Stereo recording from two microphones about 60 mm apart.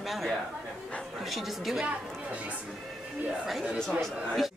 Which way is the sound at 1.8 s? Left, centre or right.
Right.